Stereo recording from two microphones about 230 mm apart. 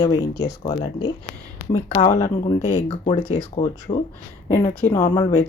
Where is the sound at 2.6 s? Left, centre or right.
Left.